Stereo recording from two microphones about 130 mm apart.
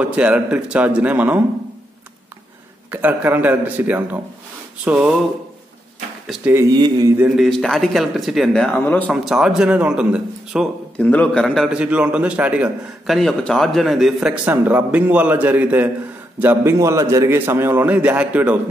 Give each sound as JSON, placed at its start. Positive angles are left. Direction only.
{"t": 0.0, "sound": "a man's voice", "side_deg": -10}
{"t": 2.9, "sound": "a man's voice", "side_deg": -15}
{"t": 6.2, "sound": "speech", "side_deg": -5}
{"t": 6.7, "sound": "speech", "side_deg": -30}
{"t": 7.2, "sound": "a man's voice", "side_deg": -5}
{"t": 8.7, "sound": "a man's voice", "side_deg": 10}
{"t": 9.1, "sound": "a man's voice", "side_deg": -5}
{"t": 11.0, "sound": "a man's voice", "side_deg": 10}
{"t": 11.7, "sound": "a man's voice", "side_deg": -10}
{"t": 14.4, "sound": "a man's voice", "side_deg": -15}